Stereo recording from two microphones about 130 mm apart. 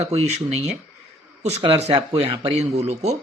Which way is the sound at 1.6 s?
45° right (ahead or behind).